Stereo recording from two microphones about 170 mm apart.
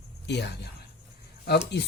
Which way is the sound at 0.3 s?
80° left.